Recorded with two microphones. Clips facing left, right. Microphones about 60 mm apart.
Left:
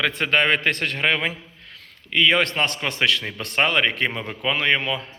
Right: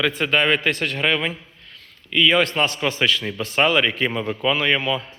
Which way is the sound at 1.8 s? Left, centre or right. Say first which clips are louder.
Right 1 dB; left.